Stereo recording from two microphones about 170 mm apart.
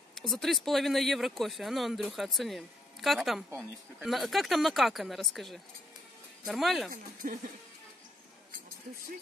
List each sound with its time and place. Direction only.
0.1 s speech: centre (ahead or behind)
7.2 s speech: 50° right (ahead or behind)